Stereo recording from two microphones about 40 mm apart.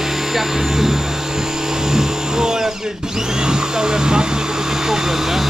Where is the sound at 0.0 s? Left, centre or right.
Centre.